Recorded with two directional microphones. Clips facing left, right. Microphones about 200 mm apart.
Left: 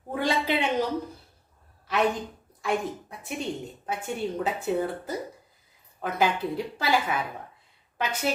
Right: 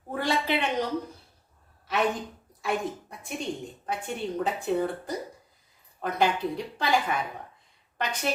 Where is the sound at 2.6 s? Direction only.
Centre (ahead or behind).